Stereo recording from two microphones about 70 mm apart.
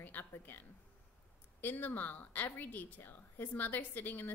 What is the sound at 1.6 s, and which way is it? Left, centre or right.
A woman's voice, left.